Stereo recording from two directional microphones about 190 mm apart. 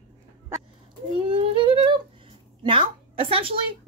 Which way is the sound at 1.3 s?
30° right (ahead or behind).